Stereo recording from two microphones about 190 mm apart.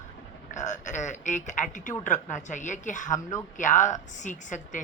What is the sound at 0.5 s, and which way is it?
Speech, 40° left (ahead or behind).